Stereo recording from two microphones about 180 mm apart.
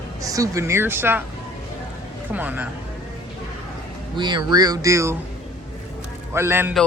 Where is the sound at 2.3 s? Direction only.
10° right (ahead or behind).